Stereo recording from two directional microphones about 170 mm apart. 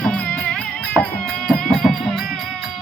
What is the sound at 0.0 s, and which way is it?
Music, 5° left (ahead or behind).